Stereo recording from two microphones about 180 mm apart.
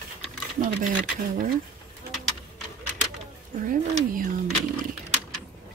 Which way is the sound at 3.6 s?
50° right (ahead or behind).